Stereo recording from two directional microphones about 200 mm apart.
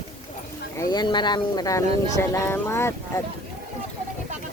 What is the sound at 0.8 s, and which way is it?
Speech, 20° left (ahead or behind).